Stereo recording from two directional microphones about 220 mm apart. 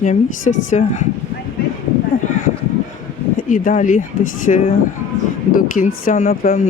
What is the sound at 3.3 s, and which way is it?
Speech, 40° left (ahead or behind).